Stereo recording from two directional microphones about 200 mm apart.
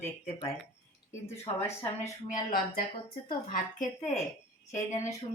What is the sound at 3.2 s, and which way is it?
Speech, 40° left (ahead or behind).